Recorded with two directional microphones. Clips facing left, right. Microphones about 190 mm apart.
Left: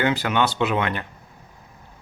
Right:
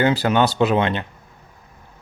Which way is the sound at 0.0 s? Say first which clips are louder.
Right 4 dB; 35° right (ahead or behind).